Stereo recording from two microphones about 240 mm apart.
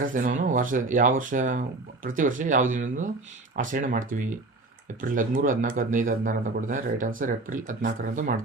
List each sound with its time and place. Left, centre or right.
0.0 s speech: right